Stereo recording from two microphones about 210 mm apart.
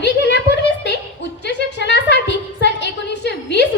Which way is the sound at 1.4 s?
55° left (ahead or behind).